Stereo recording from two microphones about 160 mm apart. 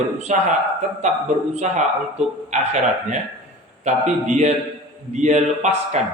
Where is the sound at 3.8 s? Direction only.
45° right (ahead or behind).